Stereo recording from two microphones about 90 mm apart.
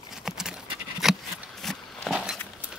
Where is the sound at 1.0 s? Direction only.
5° right (ahead or behind).